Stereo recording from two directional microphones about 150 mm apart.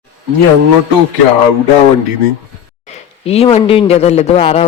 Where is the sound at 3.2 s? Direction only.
40° left (ahead or behind).